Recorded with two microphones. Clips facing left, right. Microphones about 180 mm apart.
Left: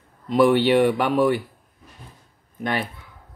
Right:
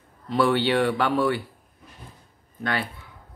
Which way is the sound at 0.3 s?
15° left (ahead or behind).